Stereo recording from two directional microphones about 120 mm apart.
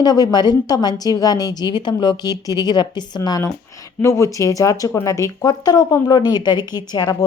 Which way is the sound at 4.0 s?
25° left (ahead or behind).